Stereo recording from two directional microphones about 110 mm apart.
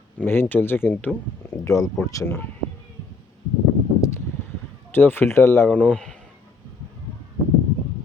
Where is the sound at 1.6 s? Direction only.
30° left (ahead or behind).